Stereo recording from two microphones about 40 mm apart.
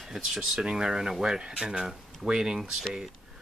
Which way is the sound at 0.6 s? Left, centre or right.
Centre.